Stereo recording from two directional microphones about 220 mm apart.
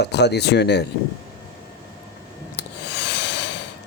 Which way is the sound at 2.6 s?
50° left (ahead or behind).